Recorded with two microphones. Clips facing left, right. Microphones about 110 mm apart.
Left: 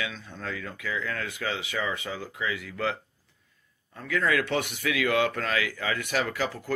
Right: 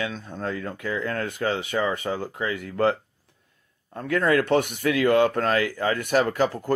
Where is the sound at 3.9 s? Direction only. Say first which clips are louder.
Right 5 dB; 55° right (ahead or behind).